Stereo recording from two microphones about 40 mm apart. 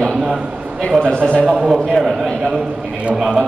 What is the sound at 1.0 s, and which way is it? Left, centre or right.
Speech, left.